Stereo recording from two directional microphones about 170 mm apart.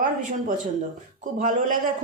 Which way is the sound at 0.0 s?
50° right (ahead or behind).